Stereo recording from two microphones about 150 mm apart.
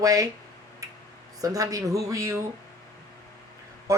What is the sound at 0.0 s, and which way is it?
Speech, 20° right (ahead or behind).